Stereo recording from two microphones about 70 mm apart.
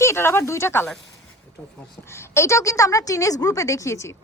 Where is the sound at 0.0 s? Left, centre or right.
Left.